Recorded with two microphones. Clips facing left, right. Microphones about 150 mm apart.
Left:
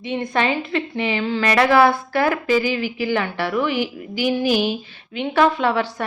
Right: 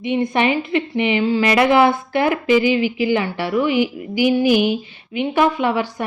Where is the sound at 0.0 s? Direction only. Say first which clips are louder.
Right 4 dB; 15° right (ahead or behind).